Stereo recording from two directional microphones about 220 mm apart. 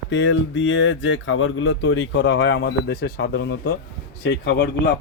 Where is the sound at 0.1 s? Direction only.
55° left (ahead or behind).